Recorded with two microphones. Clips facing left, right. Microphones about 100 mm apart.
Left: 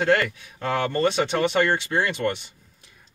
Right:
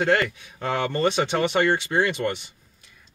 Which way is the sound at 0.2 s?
20° right (ahead or behind).